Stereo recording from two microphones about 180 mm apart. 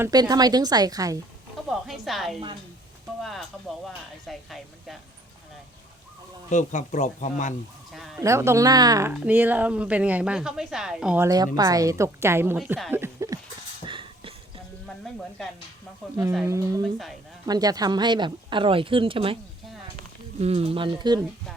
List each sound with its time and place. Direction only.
0.0 s speech: 20° right (ahead or behind)
1.7 s speech: centre (ahead or behind)
6.5 s speech: 45° left (ahead or behind)
7.9 s speech: centre (ahead or behind)
8.2 s speech: 15° right (ahead or behind)
11.3 s speech: 20° right (ahead or behind)
13.8 s a sound: 25° right (ahead or behind)
16.5 s speech: 15° right (ahead or behind)
20.4 s speech: 35° right (ahead or behind)